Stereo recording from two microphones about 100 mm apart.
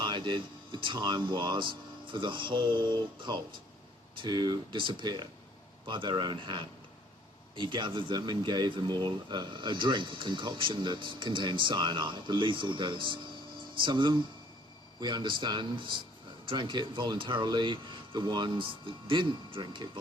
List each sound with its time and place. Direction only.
0.0 s speech: 50° right (ahead or behind)